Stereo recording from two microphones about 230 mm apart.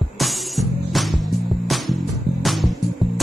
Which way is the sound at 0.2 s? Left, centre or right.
Centre.